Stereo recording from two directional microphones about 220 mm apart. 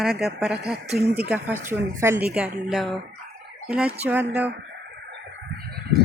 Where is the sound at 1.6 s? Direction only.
10° right (ahead or behind).